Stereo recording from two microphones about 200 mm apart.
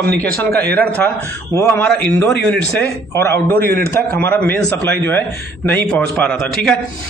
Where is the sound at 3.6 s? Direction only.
50° right (ahead or behind).